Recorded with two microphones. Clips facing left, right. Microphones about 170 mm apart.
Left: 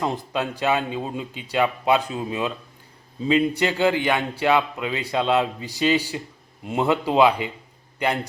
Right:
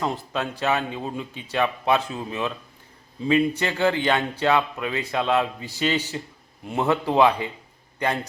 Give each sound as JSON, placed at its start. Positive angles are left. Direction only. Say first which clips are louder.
{"t": 0.0, "sound": "a man's voice", "louder": "left 2 dB", "side_deg": 15}